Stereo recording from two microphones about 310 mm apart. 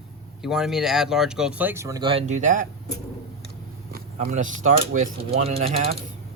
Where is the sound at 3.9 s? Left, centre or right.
Right.